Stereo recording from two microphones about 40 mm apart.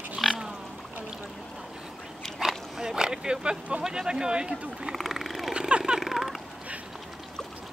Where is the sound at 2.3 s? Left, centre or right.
Centre.